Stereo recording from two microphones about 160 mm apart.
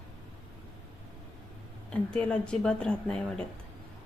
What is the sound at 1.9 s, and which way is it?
Speech, 5° left (ahead or behind).